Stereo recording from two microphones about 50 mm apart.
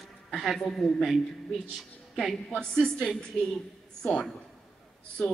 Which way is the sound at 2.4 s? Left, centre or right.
Centre.